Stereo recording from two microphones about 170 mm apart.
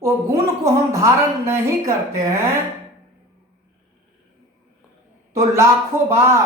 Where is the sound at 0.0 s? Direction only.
15° right (ahead or behind).